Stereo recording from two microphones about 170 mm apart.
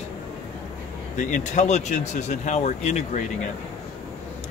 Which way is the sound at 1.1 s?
45° left (ahead or behind).